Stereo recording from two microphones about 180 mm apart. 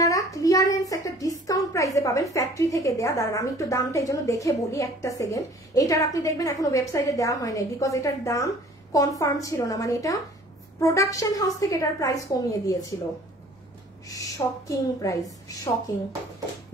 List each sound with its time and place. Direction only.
0.0 s a child's voice: 20° left (ahead or behind)
14.0 s a woman's voice: 20° left (ahead or behind)